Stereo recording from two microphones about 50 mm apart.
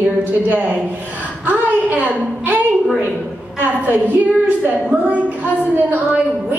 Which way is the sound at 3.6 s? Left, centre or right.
Right.